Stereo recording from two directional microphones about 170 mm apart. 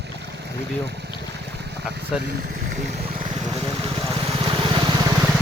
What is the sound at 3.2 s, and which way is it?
Vehicle, 30° right (ahead or behind).